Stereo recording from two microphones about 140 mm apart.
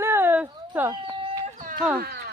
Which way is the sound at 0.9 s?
35° right (ahead or behind).